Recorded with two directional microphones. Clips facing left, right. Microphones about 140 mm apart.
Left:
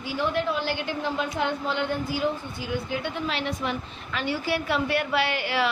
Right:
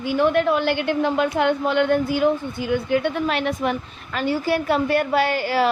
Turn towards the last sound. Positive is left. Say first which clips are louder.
# right 6 dB
turn(degrees=-40)  # may be behind; listen again after turning